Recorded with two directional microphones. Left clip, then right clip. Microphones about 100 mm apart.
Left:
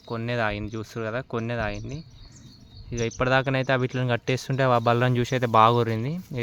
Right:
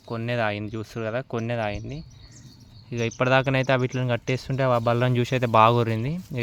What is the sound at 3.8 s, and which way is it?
Speech, 5° right (ahead or behind).